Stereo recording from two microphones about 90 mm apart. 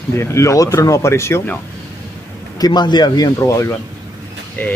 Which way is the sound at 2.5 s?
45° left (ahead or behind).